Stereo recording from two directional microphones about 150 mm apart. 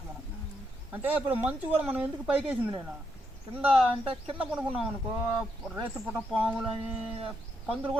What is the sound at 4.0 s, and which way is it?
Speech, 40° right (ahead or behind).